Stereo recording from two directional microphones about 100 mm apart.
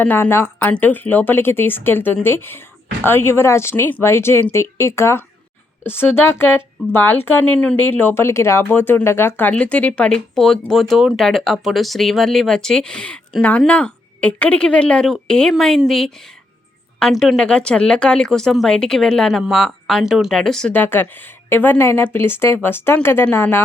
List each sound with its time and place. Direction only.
0.0 s speech: 20° left (ahead or behind); by 20.7 s 5° left (ahead or behind)
20.7 s speech: 20° left (ahead or behind)